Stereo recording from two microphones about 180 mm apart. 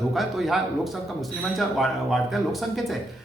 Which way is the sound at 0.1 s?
Centre (ahead or behind).